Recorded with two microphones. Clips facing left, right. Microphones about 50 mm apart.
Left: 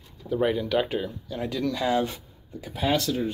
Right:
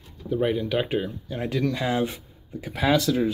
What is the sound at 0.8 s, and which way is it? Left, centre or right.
Speech, right.